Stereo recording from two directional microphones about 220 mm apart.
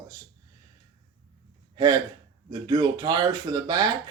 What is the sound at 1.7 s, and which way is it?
Gasp, 20° right (ahead or behind).